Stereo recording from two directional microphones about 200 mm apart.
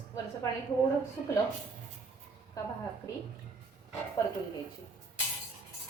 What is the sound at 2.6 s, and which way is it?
Speech, 15° left (ahead or behind).